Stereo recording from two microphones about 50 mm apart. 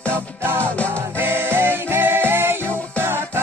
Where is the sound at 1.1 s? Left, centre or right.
Right.